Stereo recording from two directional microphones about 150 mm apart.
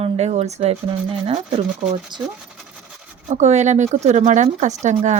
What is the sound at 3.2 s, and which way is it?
Speech, 50° right (ahead or behind).